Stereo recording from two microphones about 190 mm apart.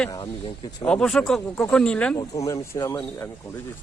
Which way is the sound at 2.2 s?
15° left (ahead or behind).